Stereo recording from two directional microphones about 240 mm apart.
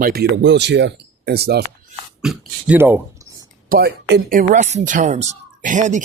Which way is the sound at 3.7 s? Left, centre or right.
Right.